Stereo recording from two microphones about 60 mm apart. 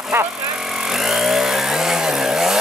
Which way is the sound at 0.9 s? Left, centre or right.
Centre.